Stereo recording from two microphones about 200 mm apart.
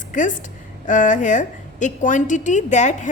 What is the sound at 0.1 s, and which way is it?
A woman's voice, 40° left (ahead or behind).